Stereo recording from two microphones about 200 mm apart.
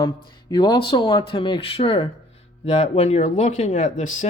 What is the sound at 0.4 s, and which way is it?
Speech, 20° left (ahead or behind).